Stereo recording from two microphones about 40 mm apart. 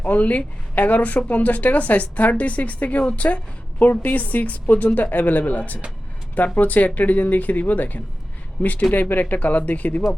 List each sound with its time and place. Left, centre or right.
0.0 s a woman's voice: left